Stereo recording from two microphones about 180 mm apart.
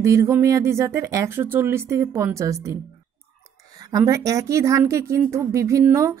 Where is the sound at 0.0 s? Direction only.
15° right (ahead or behind).